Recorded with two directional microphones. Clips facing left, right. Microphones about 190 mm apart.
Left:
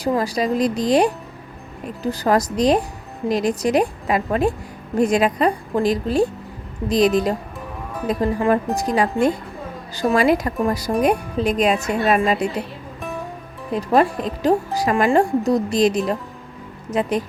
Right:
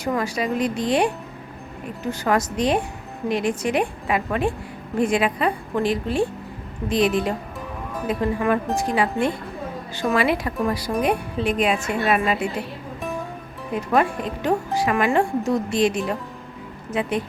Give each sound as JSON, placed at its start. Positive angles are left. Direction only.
{"t": 0.0, "sound": "speech", "side_deg": 35}
{"t": 13.7, "sound": "speech", "side_deg": 35}